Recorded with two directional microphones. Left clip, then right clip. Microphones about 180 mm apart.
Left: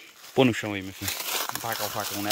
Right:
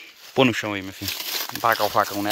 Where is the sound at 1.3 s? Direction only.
15° left (ahead or behind).